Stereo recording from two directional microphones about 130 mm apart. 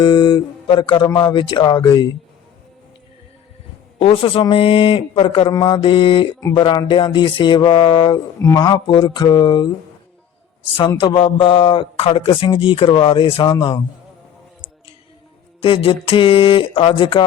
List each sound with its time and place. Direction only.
0.0 s a man's voice: 35° left (ahead or behind)
3.9 s a man's voice: 45° left (ahead or behind)
8.4 s a man's voice: 25° left (ahead or behind)
10.8 s a man's voice: 40° left (ahead or behind)
15.6 s a man's voice: 40° left (ahead or behind)